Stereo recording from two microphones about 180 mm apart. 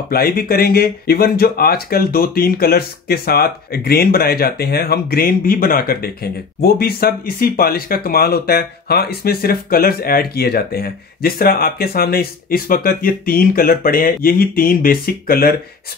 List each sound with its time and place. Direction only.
0.1 s speech: 55° left (ahead or behind)